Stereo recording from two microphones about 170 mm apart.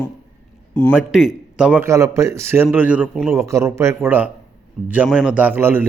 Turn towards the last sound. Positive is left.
turn(degrees=-10)  # may be behind; listen again after turning